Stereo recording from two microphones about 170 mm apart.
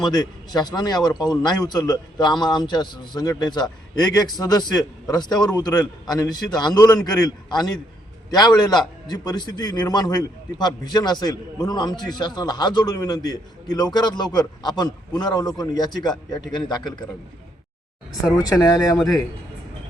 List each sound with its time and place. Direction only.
0.0 s a man's voice: 25° left (ahead or behind)
18.3 s a man's voice: 20° left (ahead or behind)
18.9 s a man's voice: centre (ahead or behind)